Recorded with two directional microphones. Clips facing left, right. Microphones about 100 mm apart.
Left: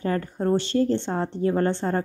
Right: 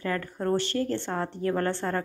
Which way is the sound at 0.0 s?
25° left (ahead or behind).